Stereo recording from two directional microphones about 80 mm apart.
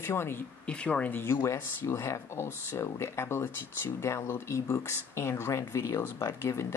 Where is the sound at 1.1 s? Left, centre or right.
Left.